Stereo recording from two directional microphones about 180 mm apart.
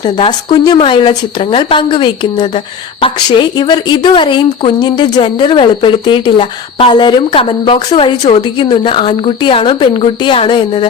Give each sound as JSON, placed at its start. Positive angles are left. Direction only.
{"t": 0.0, "sound": "a woman's voice", "side_deg": 25}